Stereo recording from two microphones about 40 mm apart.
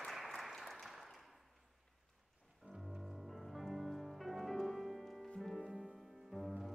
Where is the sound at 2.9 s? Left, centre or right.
Centre.